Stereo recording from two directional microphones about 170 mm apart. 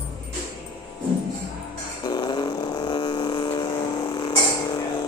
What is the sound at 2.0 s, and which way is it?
Vehicle, 25° left (ahead or behind).